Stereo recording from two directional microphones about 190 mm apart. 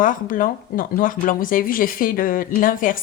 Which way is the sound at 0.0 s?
45° left (ahead or behind).